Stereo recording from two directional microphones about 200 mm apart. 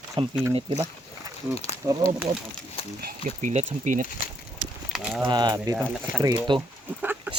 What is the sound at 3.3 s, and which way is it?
Speech, 40° right (ahead or behind).